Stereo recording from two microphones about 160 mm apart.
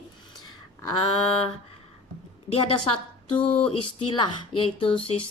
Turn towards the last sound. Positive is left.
turn(degrees=35)  # may be behind; listen again after turning